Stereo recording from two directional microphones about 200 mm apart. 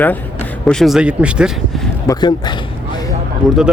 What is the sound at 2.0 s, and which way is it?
Speech, 20° left (ahead or behind).